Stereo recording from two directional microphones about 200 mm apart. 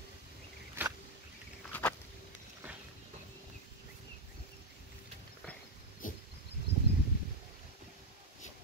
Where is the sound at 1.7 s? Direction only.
10° left (ahead or behind).